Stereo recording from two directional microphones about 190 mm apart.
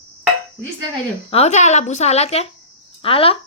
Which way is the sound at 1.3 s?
35° left (ahead or behind).